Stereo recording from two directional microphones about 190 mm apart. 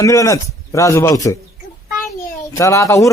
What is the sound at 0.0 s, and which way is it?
A man's voice, 15° left (ahead or behind).